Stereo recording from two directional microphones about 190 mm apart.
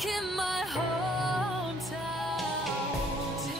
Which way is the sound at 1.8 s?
Centre (ahead or behind).